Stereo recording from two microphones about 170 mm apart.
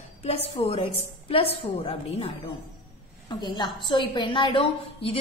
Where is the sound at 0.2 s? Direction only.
35° left (ahead or behind).